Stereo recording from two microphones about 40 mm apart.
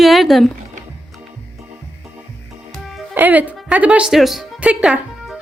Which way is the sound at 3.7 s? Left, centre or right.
Right.